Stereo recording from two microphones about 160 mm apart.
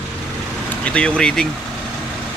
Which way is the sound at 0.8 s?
5° left (ahead or behind).